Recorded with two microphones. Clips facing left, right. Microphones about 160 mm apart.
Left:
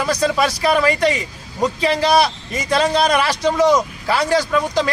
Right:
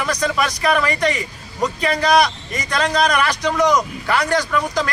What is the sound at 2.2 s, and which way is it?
Speech, 30° left (ahead or behind).